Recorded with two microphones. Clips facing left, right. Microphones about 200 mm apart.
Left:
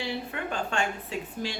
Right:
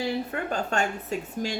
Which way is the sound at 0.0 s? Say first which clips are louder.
Right 4 dB; 40° right (ahead or behind).